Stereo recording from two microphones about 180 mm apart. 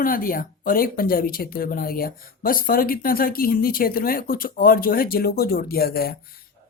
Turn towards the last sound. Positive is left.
turn(degrees=55)  # may be behind; listen again after turning